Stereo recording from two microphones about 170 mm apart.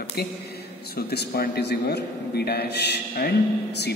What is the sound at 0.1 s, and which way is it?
A man's voice, 70° left (ahead or behind).